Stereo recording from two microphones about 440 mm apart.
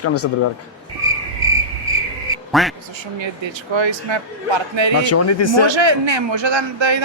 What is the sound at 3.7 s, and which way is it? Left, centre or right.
Speech, right.